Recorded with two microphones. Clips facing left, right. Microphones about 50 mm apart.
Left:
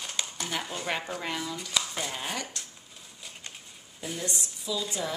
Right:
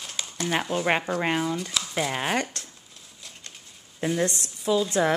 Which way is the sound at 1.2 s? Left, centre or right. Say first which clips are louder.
Right 8 dB; right.